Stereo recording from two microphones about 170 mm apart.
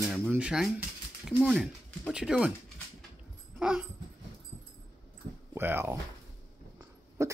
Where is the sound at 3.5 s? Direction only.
5° right (ahead or behind).